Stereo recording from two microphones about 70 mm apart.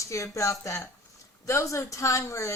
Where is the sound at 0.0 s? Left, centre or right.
Left.